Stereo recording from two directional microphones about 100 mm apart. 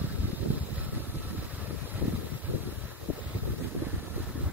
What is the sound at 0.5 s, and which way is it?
Vehicle, 15° right (ahead or behind).